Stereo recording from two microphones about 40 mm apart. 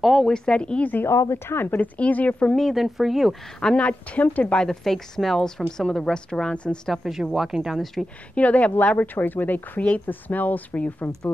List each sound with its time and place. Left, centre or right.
0.0 s speech: centre
0.3 s speech: left
1.0 s speech: left
2.0 s a woman's voice: left
2.7 s speech: centre
3.7 s a woman's voice: left
4.6 s speech: centre
6.5 s speech: left
7.0 s speech: centre
7.8 s speech: centre
8.4 s a woman's voice: left
8.7 s speech: left
9.8 s a woman's voice: left
10.0 s speech: left